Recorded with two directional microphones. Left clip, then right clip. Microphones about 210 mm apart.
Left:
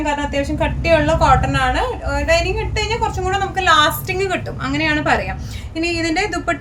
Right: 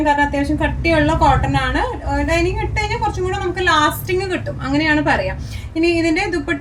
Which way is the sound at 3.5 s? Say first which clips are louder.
Left 2 dB; 45° left (ahead or behind).